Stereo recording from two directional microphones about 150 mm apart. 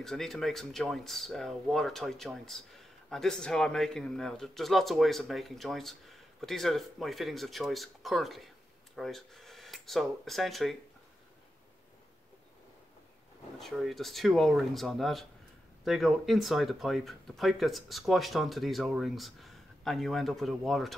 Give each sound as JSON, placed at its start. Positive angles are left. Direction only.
{"t": 0.0, "sound": "speech", "side_deg": 0}
{"t": 13.6, "sound": "speech", "side_deg": 0}